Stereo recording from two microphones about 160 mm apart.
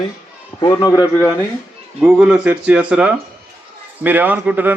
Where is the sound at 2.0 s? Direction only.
5° right (ahead or behind).